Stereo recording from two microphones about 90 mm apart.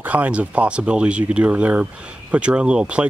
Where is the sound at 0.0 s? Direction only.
15° right (ahead or behind).